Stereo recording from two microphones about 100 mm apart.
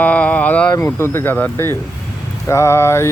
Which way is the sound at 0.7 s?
25° left (ahead or behind).